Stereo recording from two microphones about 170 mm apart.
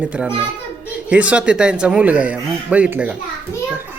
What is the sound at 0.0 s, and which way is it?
Speech, 5° right (ahead or behind).